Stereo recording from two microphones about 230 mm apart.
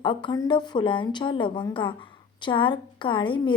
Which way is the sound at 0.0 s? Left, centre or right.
Left.